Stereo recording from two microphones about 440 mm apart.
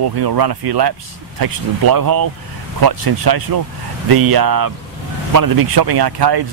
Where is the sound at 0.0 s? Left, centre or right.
Right.